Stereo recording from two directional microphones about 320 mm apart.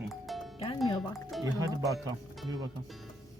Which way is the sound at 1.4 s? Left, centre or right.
Centre.